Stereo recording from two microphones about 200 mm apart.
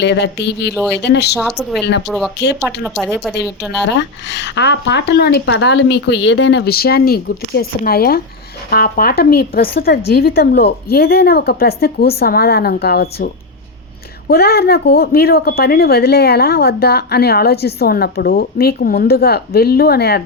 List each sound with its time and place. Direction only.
0.0 s speech: 60° left (ahead or behind)
1.4 s speech: centre (ahead or behind)
3.8 s a woman's voice: 60° left (ahead or behind)